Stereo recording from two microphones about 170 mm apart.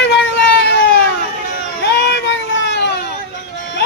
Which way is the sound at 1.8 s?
90° left.